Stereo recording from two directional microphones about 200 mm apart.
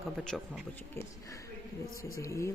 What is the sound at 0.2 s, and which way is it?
Speech, centre (ahead or behind).